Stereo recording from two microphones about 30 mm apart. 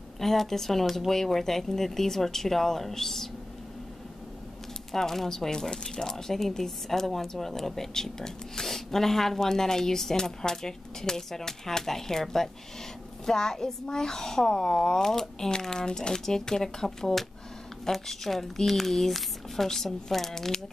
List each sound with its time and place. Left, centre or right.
0.2 s speech: centre
4.9 s speech: centre
5.5 s a woman's voice: left; by 20.5 s centre